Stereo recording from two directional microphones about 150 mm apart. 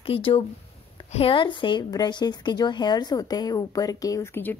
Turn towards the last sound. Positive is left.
turn(degrees=15)  # may be behind; listen again after turning